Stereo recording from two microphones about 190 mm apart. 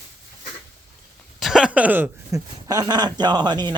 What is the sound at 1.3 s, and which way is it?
Speech, centre (ahead or behind).